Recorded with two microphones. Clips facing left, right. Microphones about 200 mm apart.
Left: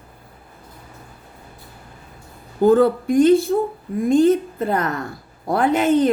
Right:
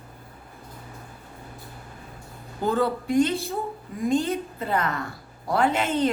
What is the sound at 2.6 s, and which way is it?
Speech, 50° left (ahead or behind).